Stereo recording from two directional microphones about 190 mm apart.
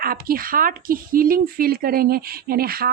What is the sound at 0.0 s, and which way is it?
A woman's voice, 50° right (ahead or behind).